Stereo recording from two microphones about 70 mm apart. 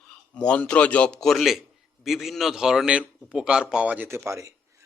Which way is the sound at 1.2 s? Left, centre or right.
Centre.